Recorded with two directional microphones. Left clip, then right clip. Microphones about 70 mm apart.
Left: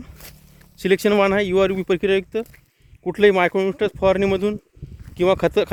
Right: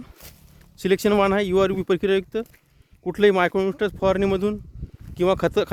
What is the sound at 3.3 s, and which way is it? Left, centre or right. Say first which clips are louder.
Speech: left 2 dB; right.